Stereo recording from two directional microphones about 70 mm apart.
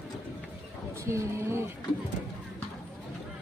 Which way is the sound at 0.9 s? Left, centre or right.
Right.